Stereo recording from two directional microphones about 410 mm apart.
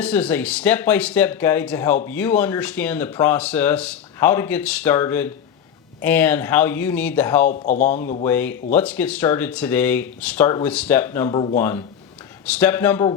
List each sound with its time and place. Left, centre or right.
0.0 s speech: centre
7.5 s speech: centre
8.2 s speech: centre